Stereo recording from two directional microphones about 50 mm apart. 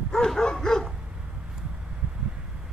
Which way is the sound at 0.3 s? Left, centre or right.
Centre.